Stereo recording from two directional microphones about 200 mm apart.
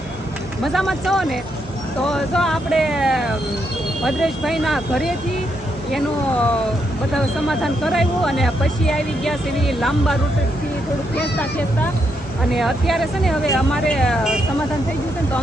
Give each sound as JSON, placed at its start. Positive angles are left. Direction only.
{"t": 0.6, "sound": "speech", "side_deg": 0}
{"t": 7.4, "sound": "speech", "side_deg": 0}
{"t": 12.5, "sound": "speech", "side_deg": 0}